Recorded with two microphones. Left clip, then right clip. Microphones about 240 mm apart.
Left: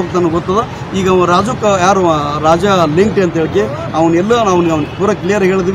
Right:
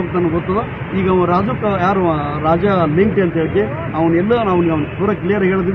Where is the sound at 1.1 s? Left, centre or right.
Left.